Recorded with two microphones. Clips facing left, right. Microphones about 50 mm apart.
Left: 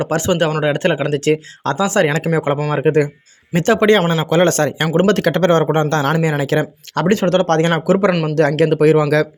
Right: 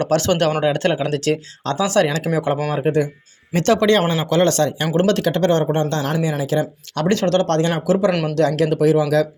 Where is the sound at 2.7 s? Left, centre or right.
Left.